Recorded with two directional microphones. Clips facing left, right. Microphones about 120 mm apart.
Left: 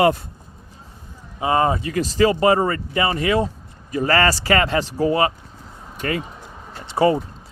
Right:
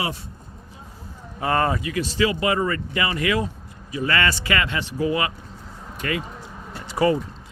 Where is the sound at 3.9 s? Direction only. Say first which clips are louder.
Left 5 dB; 40° left (ahead or behind).